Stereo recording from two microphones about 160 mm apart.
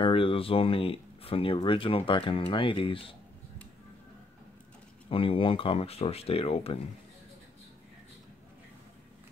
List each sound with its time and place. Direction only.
0.0 s speech: 35° left (ahead or behind)
5.1 s speech: 35° left (ahead or behind)